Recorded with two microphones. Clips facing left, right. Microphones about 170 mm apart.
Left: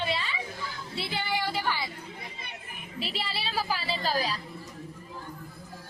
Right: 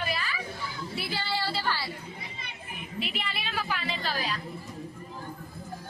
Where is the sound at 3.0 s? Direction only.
35° left (ahead or behind).